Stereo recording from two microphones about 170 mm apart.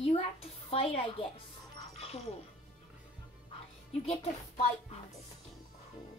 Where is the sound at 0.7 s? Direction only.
35° left (ahead or behind).